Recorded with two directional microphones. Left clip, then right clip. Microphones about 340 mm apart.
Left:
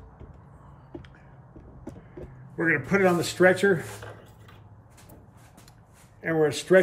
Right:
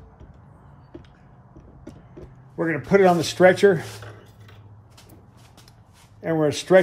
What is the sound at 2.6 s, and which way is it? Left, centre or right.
A man's voice, centre.